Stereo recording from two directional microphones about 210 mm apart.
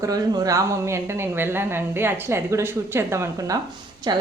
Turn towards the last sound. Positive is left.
turn(degrees=-20)  # may be behind; listen again after turning